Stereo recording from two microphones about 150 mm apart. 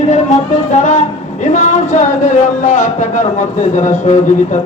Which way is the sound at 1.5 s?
55° left (ahead or behind).